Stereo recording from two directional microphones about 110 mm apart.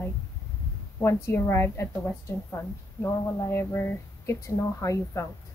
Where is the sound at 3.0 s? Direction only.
20° left (ahead or behind).